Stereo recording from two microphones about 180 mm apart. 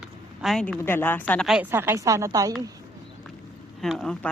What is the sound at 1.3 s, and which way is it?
Speech, centre (ahead or behind).